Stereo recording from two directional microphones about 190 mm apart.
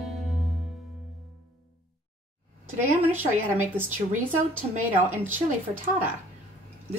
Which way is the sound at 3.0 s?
10° right (ahead or behind).